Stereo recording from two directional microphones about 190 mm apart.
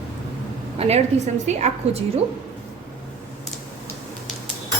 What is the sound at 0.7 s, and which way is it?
Speech, 35° right (ahead or behind).